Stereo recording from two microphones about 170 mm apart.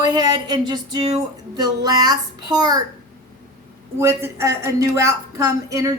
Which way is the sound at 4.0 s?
15° right (ahead or behind).